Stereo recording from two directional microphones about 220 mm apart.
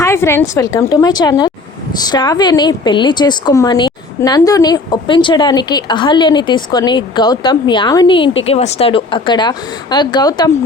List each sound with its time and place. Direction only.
0.0 s a woman's voice: 10° left (ahead or behind)